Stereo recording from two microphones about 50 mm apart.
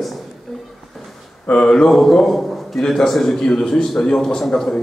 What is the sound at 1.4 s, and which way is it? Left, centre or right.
Speech, left.